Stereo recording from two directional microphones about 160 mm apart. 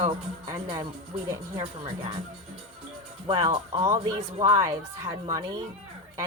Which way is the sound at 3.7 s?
25° right (ahead or behind).